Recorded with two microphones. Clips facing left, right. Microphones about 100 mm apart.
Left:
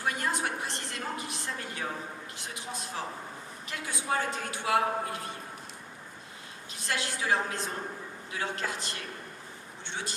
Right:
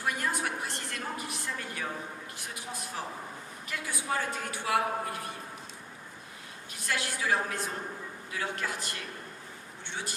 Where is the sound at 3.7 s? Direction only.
20° left (ahead or behind).